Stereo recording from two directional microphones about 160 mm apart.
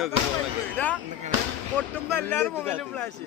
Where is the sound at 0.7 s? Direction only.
10° left (ahead or behind).